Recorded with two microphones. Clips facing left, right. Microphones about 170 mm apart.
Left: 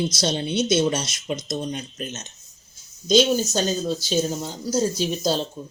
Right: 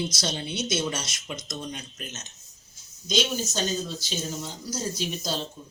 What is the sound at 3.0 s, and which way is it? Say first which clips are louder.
Speech: left 9 dB; 30° left (ahead or behind).